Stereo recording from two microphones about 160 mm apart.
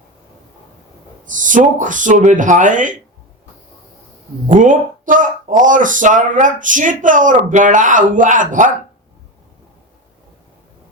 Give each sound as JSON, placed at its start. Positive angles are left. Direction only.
{"t": 1.2, "sound": "speech", "side_deg": -55}
{"t": 4.4, "sound": "speech", "side_deg": -55}